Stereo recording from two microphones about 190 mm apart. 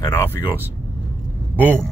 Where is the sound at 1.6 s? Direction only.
10° right (ahead or behind).